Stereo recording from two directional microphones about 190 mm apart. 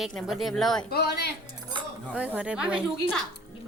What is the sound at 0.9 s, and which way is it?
Speech, 55° left (ahead or behind).